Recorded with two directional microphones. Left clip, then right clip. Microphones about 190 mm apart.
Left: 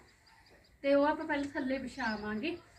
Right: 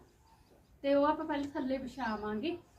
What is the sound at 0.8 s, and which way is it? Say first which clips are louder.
A woman's voice: left 1 dB; 15° right (ahead or behind).